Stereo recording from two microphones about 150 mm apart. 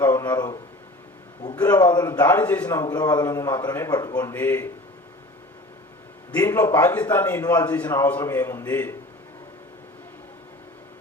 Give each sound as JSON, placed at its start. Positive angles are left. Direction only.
{"t": 0.0, "sound": "a man's voice", "side_deg": 15}
{"t": 1.6, "sound": "a man's voice", "side_deg": 25}
{"t": 2.2, "sound": "a man's voice", "side_deg": 15}
{"t": 2.6, "sound": "a man's voice", "side_deg": 25}
{"t": 4.4, "sound": "a man's voice", "side_deg": 15}
{"t": 6.3, "sound": "a man's voice", "side_deg": 15}